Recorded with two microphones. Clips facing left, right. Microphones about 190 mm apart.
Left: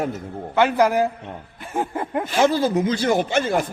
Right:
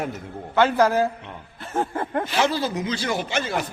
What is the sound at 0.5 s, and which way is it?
A man's voice, 15° left (ahead or behind).